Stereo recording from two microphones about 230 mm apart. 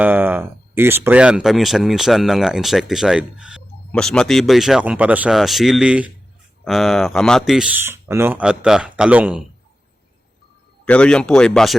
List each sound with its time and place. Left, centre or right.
0.0 s speech: centre
10.8 s speech: centre